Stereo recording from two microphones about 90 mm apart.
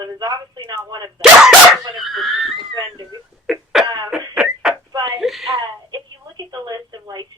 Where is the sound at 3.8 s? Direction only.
50° right (ahead or behind).